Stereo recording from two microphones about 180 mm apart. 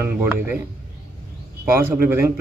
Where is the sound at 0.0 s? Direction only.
10° right (ahead or behind).